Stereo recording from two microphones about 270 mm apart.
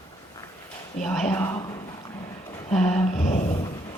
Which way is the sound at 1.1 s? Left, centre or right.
Centre.